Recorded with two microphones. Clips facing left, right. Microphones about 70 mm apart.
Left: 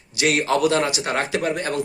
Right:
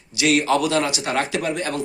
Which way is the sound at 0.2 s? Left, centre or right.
Left.